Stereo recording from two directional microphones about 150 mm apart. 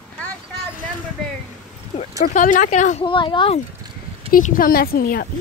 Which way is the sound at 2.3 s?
60° left (ahead or behind).